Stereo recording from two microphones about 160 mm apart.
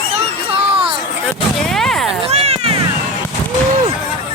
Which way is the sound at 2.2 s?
40° right (ahead or behind).